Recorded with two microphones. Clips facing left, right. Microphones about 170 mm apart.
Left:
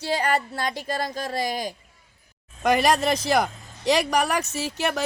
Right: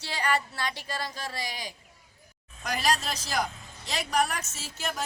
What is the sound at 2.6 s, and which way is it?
Speech, 60° left (ahead or behind).